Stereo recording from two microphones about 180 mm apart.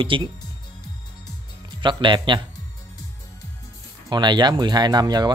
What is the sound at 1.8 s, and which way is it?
Speech, 25° right (ahead or behind).